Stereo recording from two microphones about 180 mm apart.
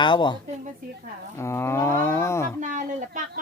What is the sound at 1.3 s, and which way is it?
Roaring cats, 15° left (ahead or behind).